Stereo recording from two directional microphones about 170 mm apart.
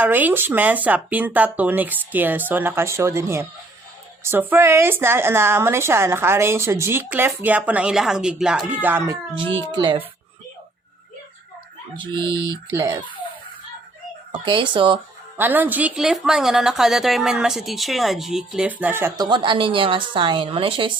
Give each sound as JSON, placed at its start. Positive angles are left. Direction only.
{"t": 0.0, "sound": "a woman's voice", "side_deg": -10}
{"t": 9.3, "sound": "speech", "side_deg": -30}
{"t": 11.9, "sound": "speech", "side_deg": -25}
{"t": 14.4, "sound": "speech", "side_deg": -30}
{"t": 15.4, "sound": "a woman's voice", "side_deg": -10}